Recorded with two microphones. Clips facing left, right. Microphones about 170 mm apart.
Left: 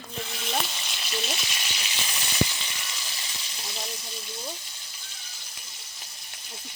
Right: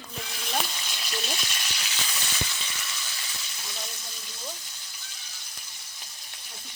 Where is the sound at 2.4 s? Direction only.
90° left.